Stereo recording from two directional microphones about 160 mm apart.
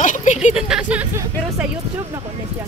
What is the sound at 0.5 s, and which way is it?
Speech, 5° right (ahead or behind).